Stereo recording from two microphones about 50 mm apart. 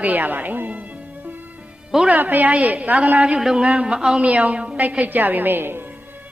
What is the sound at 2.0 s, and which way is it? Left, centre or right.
A woman's voice, right.